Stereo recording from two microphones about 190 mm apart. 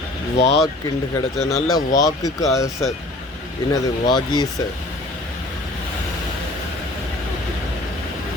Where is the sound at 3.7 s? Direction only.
20° left (ahead or behind).